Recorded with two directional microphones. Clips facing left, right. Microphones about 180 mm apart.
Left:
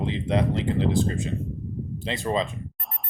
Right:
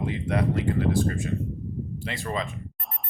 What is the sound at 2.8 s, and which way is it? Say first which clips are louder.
Music: even; centre (ahead or behind).